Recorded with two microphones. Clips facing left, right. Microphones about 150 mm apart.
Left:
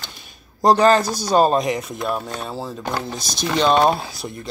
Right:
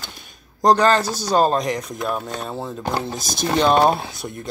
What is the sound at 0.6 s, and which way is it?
Speech, 10° left (ahead or behind).